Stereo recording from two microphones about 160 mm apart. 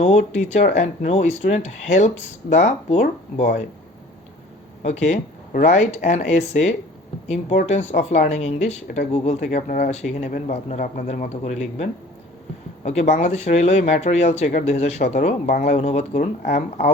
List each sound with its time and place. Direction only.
0.0 s speech: 45° left (ahead or behind)
4.8 s speech: 45° left (ahead or behind)
15.7 s speech: 45° left (ahead or behind)